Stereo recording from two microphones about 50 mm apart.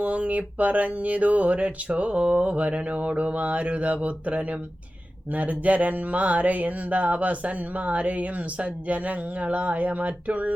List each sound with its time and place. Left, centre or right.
0.0 s mantra: right